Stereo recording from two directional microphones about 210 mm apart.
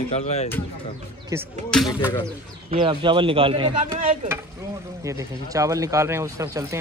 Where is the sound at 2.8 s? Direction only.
25° right (ahead or behind).